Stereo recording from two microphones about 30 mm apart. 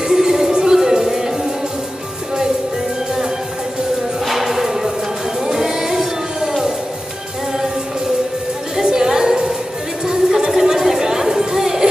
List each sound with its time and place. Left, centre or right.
0.1 s music: centre
4.3 s music: centre
8.8 s music: centre
10.5 s chatter: centre